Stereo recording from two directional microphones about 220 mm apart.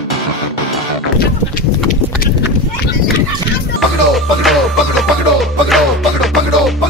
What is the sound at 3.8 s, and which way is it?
Music, centre (ahead or behind).